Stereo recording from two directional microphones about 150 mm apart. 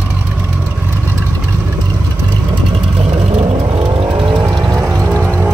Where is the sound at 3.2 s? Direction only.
40° right (ahead or behind).